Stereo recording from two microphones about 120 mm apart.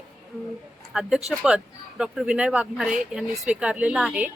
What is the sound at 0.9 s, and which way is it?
Speech, 5° right (ahead or behind).